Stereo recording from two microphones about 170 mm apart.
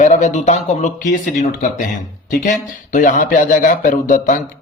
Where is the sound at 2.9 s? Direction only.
50° left (ahead or behind).